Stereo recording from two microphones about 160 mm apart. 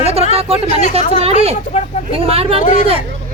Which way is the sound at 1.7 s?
40° left (ahead or behind).